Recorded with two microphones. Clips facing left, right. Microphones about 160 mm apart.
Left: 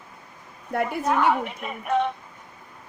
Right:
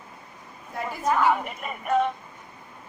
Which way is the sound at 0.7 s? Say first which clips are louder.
Left 7 dB; 65° left (ahead or behind).